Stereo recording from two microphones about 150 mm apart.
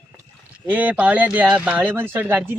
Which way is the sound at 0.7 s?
10° right (ahead or behind).